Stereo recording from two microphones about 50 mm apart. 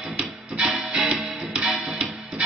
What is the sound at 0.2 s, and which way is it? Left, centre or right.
Music, centre.